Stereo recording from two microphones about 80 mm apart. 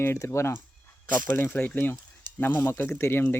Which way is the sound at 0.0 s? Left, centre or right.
Left.